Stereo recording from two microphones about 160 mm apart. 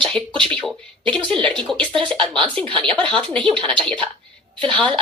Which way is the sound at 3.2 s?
30° right (ahead or behind).